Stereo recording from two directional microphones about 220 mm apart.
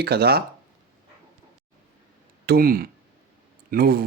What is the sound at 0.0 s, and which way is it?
Speech, 45° right (ahead or behind).